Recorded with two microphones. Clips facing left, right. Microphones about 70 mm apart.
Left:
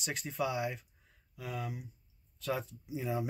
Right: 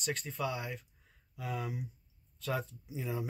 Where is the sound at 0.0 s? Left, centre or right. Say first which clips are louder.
Left 1 dB; centre.